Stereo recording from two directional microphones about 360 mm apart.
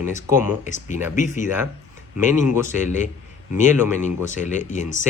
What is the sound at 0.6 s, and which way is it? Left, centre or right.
Speech, centre.